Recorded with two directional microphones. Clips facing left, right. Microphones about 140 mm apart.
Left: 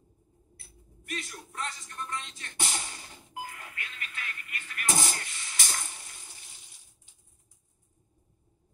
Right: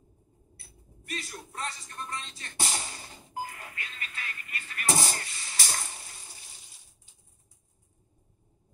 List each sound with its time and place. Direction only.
1.0 s speech: 35° right (ahead or behind)